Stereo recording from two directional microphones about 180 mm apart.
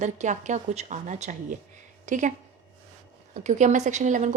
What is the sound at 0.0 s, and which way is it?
A woman's voice, 40° right (ahead or behind).